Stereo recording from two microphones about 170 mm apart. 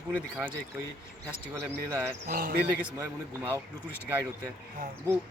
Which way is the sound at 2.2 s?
55° right (ahead or behind).